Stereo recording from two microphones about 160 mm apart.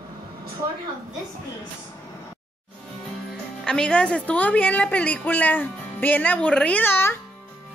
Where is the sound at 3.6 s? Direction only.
5° left (ahead or behind).